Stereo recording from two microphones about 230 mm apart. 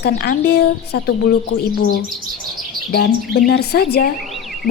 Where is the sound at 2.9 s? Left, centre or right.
Left.